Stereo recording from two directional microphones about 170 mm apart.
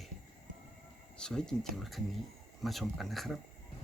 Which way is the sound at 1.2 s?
5° left (ahead or behind).